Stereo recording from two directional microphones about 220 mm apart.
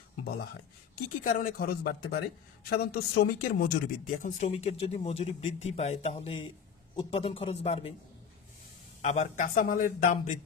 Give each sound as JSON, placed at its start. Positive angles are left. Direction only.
{"t": 1.2, "sound": "speech", "side_deg": 40}
{"t": 9.0, "sound": "speech", "side_deg": 35}